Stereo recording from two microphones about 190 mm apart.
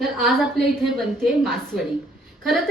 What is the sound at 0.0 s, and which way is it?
A woman's voice, centre (ahead or behind).